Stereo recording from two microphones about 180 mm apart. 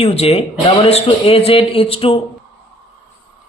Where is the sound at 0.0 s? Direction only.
35° left (ahead or behind).